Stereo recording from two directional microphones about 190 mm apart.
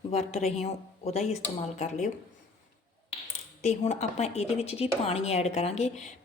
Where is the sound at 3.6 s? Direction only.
40° left (ahead or behind).